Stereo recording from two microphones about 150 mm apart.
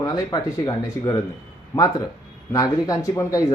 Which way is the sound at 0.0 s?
25° left (ahead or behind).